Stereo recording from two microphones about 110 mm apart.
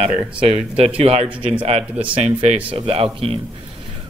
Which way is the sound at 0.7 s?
65° right (ahead or behind).